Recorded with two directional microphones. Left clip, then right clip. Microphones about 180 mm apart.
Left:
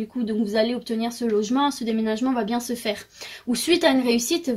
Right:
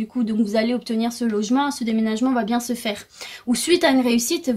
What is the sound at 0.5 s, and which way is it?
A woman's voice, 45° right (ahead or behind).